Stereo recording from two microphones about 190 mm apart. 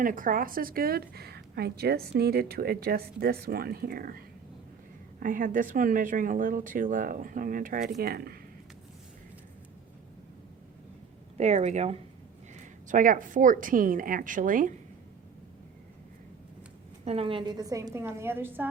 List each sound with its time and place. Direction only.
0.0 s a woman's voice: 45° right (ahead or behind)
5.2 s a woman's voice: 45° right (ahead or behind)
11.3 s a woman's voice: 35° right (ahead or behind)
17.1 s a woman's voice: 30° right (ahead or behind); by 18.7 s 10° right (ahead or behind)